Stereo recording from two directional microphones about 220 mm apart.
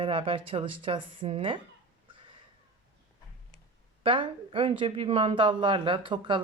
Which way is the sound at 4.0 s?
25° right (ahead or behind).